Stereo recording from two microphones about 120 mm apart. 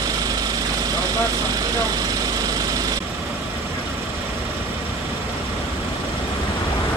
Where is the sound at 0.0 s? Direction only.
30° right (ahead or behind).